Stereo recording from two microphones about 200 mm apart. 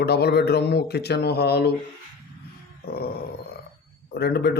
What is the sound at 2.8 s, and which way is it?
Grunt, 50° left (ahead or behind).